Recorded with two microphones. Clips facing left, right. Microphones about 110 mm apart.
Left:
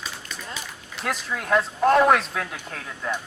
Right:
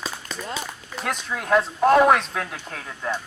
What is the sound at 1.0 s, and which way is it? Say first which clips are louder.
Speech: right 1 dB; centre (ahead or behind).